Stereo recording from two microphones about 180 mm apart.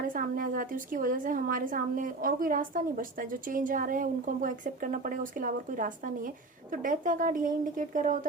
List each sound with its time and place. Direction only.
0.1 s a woman's voice: 50° right (ahead or behind)